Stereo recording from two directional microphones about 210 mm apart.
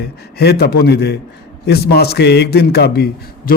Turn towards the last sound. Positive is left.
turn(degrees=45)  # may be behind; listen again after turning